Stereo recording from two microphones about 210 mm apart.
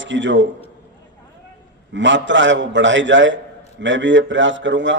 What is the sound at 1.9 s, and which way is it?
A man's voice, 60° right (ahead or behind).